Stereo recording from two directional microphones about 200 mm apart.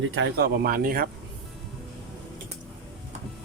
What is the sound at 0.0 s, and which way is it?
Speech, 65° right (ahead or behind).